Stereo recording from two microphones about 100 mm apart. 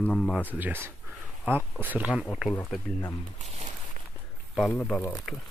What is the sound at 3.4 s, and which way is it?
Speech, 90° right.